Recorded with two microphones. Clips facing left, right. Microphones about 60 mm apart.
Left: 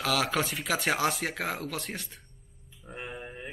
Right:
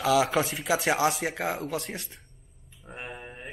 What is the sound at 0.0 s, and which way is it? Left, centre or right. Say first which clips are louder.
Speech: right 5 dB; centre.